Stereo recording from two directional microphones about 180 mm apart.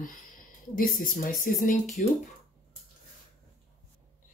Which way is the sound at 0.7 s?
50° left (ahead or behind).